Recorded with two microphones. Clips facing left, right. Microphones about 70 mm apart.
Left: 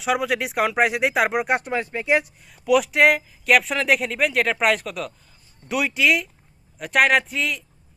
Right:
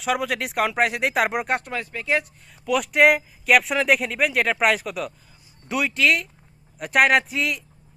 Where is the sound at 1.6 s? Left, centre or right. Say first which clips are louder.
Left 5 dB; left.